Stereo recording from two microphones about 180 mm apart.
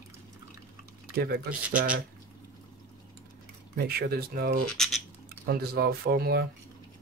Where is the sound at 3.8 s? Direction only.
60° right (ahead or behind).